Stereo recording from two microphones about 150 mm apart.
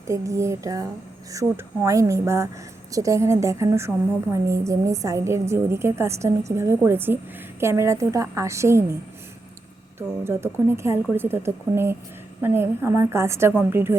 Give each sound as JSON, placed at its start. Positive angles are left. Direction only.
{"t": 0.1, "sound": "a woman's voice", "side_deg": -20}
{"t": 10.2, "sound": "speech", "side_deg": -15}